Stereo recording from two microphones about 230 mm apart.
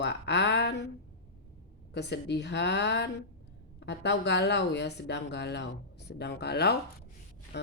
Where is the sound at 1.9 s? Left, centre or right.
Left.